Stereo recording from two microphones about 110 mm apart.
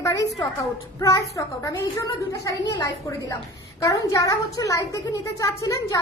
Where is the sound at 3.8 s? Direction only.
30° left (ahead or behind).